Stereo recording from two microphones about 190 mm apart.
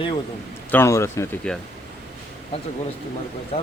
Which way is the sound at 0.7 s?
15° left (ahead or behind).